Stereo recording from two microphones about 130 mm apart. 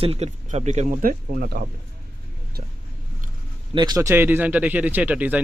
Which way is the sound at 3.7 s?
35° right (ahead or behind).